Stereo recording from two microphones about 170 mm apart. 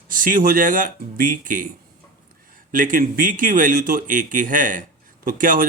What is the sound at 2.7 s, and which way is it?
Speech, 50° right (ahead or behind).